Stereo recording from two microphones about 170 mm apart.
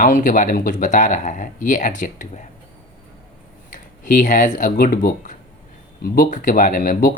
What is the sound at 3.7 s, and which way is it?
Speech, 50° left (ahead or behind).